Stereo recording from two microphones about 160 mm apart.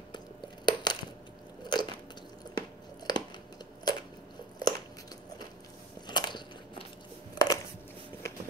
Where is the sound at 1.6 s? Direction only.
25° left (ahead or behind).